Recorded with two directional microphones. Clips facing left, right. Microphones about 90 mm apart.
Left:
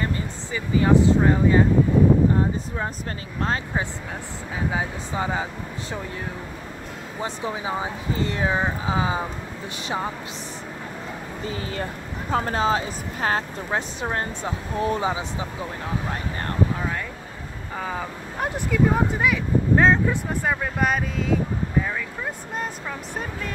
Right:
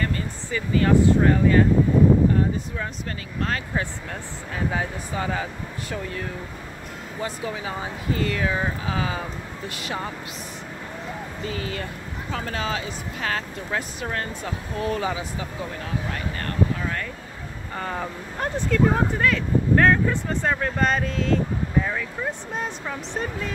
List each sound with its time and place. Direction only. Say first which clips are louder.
0.0 s speech: even; 15° left (ahead or behind)
3.3 s speech: left 1 dB; 25° left (ahead or behind)
4.6 s speech: even; 15° left (ahead or behind)
11.4 s speech: left 1 dB; 30° left (ahead or behind)
16.1 s vehicle: left 1 dB; 25° left (ahead or behind)
17.7 s speech: even; 5° left (ahead or behind)
18.5 s speech: right 1 dB; 15° left (ahead or behind)